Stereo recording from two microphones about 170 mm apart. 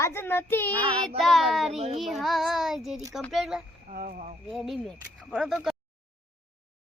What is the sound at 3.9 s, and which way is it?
Speech, 50° right (ahead or behind).